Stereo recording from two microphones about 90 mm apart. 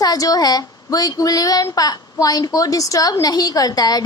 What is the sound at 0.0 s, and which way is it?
A woman's voice, 45° left (ahead or behind).